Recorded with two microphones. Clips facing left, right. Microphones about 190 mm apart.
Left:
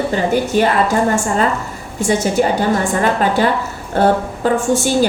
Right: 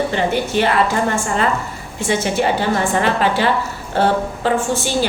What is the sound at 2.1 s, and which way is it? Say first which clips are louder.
A woman's voice: left 2 dB; 40° left (ahead or behind).